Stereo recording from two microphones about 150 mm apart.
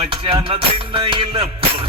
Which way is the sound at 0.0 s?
35° right (ahead or behind).